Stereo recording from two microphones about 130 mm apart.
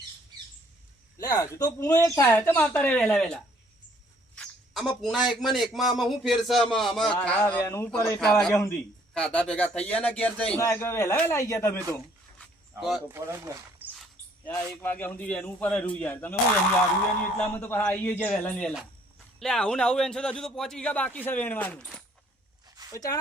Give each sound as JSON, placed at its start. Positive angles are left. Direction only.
{"t": 1.2, "sound": "a man's voice", "side_deg": 30}
{"t": 8.2, "sound": "a man's voice", "side_deg": 5}
{"t": 8.5, "sound": "speech", "side_deg": 20}
{"t": 9.1, "sound": "a man's voice", "side_deg": 10}
{"t": 10.6, "sound": "speech", "side_deg": 20}
{"t": 12.8, "sound": "a man's voice", "side_deg": 0}
{"t": 13.1, "sound": "speech", "side_deg": -20}
{"t": 14.4, "sound": "a man's voice", "side_deg": 15}
{"t": 17.6, "sound": "a man's voice", "side_deg": 15}
{"t": 22.9, "sound": "speech", "side_deg": 25}